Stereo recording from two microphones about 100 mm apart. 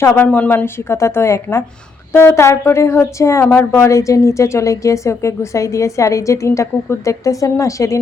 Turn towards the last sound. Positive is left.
turn(degrees=30)  # may be behind; listen again after turning